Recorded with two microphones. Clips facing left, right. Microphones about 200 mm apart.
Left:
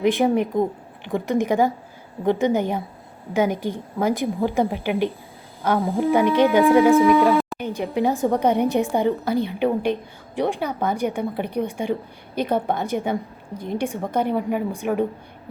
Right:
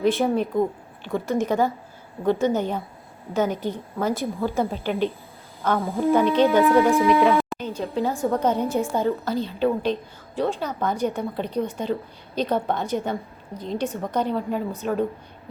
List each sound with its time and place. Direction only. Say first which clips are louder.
0.0 s a woman's voice: left 2 dB; 15° left (ahead or behind)
6.9 s speech: left 3 dB; centre (ahead or behind)
7.7 s a woman's voice: left 6 dB; 15° left (ahead or behind)